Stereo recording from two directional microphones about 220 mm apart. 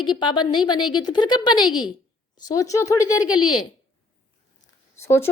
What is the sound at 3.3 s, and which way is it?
Speech, 80° left.